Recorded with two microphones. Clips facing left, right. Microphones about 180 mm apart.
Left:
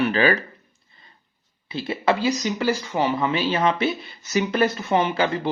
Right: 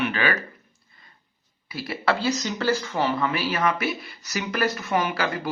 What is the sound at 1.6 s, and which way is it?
Speech, 25° left (ahead or behind).